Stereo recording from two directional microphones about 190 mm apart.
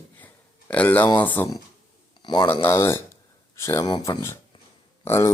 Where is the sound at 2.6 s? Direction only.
10° left (ahead or behind).